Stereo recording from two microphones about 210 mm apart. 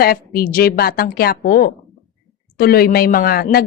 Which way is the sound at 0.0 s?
45° left (ahead or behind).